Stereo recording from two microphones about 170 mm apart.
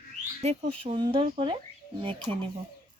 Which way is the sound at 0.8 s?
30° right (ahead or behind).